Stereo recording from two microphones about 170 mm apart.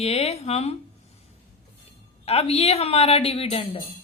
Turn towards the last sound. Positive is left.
turn(degrees=35)  # may be behind; listen again after turning